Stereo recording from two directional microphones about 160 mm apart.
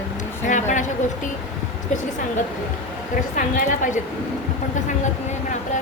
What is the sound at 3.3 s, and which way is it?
Speech, 55° left (ahead or behind).